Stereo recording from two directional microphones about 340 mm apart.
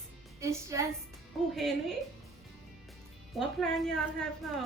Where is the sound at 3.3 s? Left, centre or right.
Centre.